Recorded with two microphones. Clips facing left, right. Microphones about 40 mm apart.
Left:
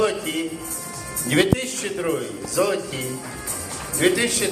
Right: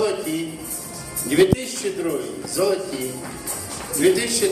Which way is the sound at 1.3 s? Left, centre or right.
Left.